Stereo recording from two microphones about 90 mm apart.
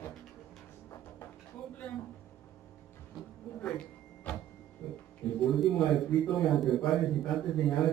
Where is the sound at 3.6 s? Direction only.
15° left (ahead or behind).